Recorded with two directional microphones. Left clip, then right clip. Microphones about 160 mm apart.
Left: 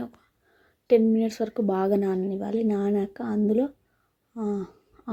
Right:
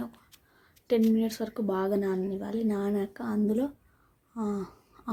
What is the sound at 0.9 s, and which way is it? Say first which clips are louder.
A woman's voice: left 6 dB; 20° left (ahead or behind).